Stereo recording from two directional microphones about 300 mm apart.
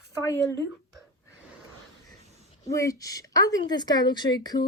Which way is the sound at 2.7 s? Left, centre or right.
Centre.